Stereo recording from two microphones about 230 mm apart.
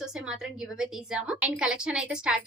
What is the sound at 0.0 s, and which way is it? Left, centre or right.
A woman's voice, centre.